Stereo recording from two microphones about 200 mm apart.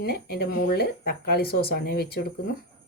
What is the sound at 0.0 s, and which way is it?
Speech, 50° left (ahead or behind).